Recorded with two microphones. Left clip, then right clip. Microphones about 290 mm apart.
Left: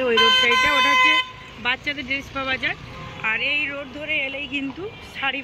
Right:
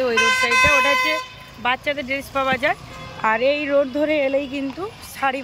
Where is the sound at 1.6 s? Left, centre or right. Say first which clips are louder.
Right 3 dB; centre.